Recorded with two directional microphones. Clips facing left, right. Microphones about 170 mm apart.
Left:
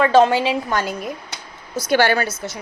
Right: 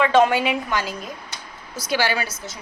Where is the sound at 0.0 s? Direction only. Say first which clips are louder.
Left 3 dB; 30° left (ahead or behind).